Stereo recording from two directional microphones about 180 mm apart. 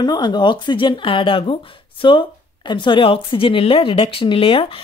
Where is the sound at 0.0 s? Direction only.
25° left (ahead or behind).